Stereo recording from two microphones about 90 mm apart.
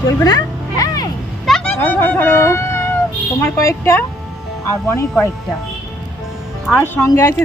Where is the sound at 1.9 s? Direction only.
20° left (ahead or behind).